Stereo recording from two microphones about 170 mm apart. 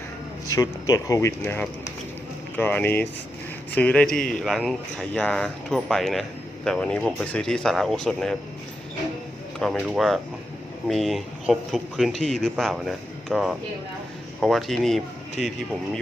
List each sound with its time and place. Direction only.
0.5 s speech: 20° left (ahead or behind); by 8.4 s 5° left (ahead or behind)
9.6 s speech: centre (ahead or behind)